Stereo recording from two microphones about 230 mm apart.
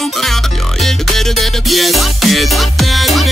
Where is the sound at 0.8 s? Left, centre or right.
Centre.